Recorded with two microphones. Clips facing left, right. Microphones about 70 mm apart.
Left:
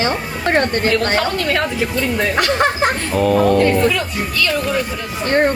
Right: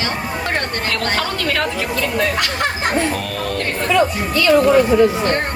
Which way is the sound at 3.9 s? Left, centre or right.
Right.